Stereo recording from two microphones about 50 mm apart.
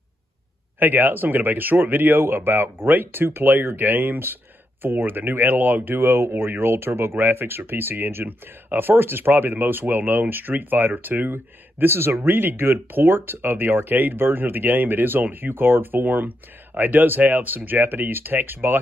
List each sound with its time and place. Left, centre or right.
0.7 s speech: right
5.9 s speech: right